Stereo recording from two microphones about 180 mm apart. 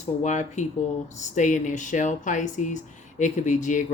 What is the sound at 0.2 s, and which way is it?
Speech, 40° left (ahead or behind).